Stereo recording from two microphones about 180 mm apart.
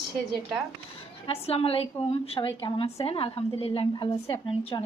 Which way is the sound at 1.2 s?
35° left (ahead or behind).